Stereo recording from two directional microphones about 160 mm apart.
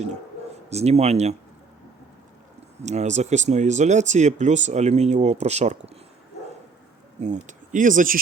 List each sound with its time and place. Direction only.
0.7 s speech: 40° right (ahead or behind)
2.8 s speech: 45° right (ahead or behind)
7.2 s speech: 50° right (ahead or behind)